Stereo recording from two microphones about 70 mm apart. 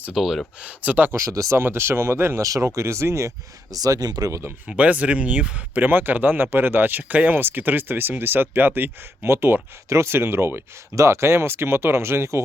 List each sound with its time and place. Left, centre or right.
0.1 s speech: centre
0.6 s speech: right
1.1 s speech: right
1.5 s speech: right
2.4 s speech: right
2.6 s speech: right
4.3 s speech: right
4.6 s speech: centre; by 12.4 s right